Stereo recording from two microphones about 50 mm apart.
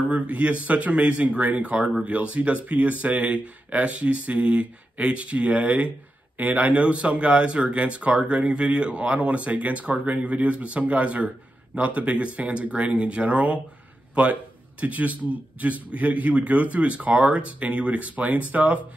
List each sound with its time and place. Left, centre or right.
0.1 s speech: right